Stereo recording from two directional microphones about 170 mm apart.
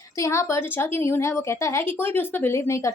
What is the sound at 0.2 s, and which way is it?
A woman's voice, 15° left (ahead or behind).